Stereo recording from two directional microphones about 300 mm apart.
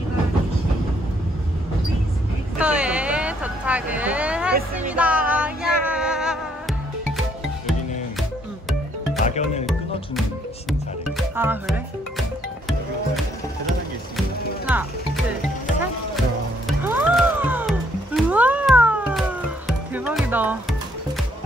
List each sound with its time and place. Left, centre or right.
2.6 s vehicle: centre
4.9 s music: centre
9.2 s music: left
10.7 s music: centre
14.7 s music: centre
16.6 s music: centre